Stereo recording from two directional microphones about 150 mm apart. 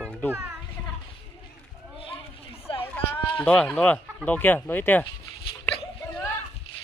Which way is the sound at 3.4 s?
5° left (ahead or behind).